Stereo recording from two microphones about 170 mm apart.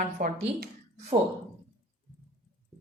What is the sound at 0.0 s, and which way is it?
Speech, 55° right (ahead or behind).